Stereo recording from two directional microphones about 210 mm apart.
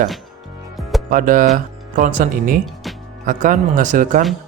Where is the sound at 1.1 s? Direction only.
40° right (ahead or behind).